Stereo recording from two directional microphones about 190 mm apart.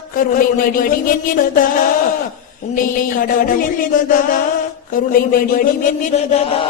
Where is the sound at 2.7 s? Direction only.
45° left (ahead or behind).